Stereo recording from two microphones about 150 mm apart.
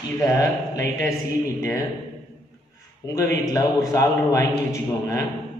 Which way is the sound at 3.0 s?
25° left (ahead or behind).